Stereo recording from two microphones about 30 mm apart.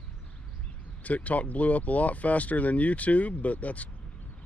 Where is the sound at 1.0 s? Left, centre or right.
Left.